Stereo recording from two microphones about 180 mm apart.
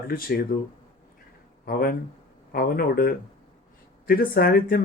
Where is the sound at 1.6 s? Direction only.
55° left (ahead or behind).